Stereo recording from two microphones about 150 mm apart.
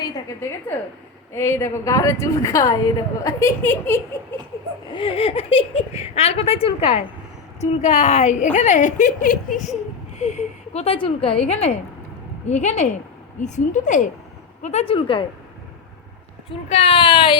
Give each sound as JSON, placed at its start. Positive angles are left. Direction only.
{"t": 0.4, "sound": "a woman's voice", "side_deg": 20}
{"t": 4.9, "sound": "a woman's voice", "side_deg": 35}
{"t": 10.2, "sound": "a woman's voice", "side_deg": 45}
{"t": 16.5, "sound": "a woman's voice", "side_deg": 40}